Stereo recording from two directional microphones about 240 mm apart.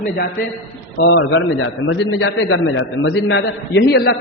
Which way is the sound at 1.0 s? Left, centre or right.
Left.